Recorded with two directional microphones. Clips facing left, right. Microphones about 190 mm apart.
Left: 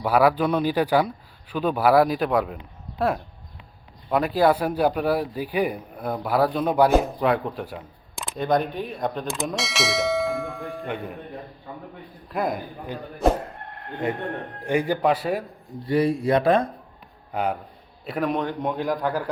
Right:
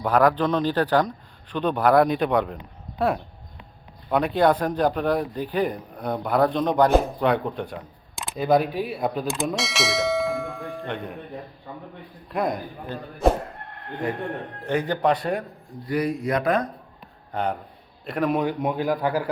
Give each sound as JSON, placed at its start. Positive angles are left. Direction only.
{"t": 0.0, "sound": "a man's voice", "side_deg": 5}
{"t": 12.3, "sound": "speech", "side_deg": 0}
{"t": 14.0, "sound": "speech", "side_deg": 25}
{"t": 14.6, "sound": "a man's voice", "side_deg": 10}
{"t": 15.9, "sound": "speech", "side_deg": 30}
{"t": 17.3, "sound": "a man's voice", "side_deg": 10}